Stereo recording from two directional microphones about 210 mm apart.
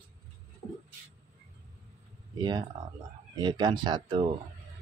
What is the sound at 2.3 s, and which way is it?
Speech, 20° right (ahead or behind).